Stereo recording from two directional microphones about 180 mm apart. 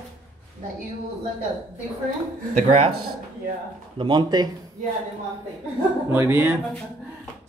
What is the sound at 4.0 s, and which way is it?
Speech, 25° right (ahead or behind).